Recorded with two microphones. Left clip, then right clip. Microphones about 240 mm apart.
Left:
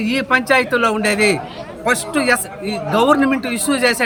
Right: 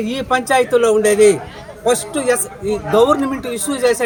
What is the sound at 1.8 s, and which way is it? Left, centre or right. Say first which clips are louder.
Speech: right 1 dB; centre.